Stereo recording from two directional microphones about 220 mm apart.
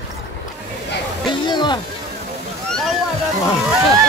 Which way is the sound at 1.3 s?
20° left (ahead or behind).